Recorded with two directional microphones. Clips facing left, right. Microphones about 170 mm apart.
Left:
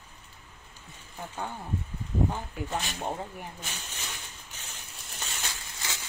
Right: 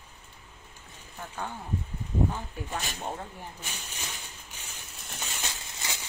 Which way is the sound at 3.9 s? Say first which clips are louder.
Even; 10° right (ahead or behind).